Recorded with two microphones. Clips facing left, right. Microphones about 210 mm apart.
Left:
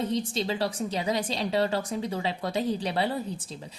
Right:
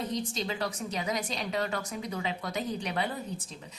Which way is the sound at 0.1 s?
30° left (ahead or behind).